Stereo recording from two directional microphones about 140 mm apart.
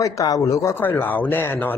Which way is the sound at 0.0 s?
25° left (ahead or behind).